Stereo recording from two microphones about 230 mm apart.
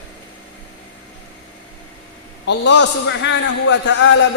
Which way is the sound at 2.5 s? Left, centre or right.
Left.